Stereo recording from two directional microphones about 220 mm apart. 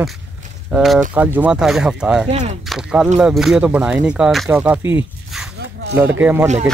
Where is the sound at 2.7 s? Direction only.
5° right (ahead or behind).